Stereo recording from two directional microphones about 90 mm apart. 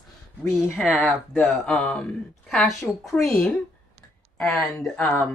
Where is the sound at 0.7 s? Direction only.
20° left (ahead or behind).